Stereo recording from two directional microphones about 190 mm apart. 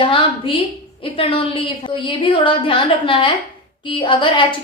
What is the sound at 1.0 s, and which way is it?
A woman's voice, 30° left (ahead or behind).